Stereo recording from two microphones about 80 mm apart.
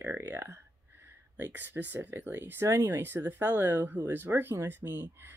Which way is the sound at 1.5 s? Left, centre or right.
Right.